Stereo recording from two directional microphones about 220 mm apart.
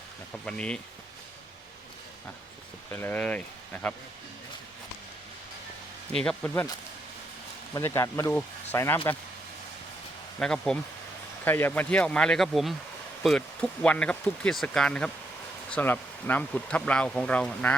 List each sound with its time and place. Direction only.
0.4 s speech: 5° left (ahead or behind)
2.9 s speech: 10° left (ahead or behind)
6.1 s speech: 5° left (ahead or behind)
10.4 s speech: 5° left (ahead or behind)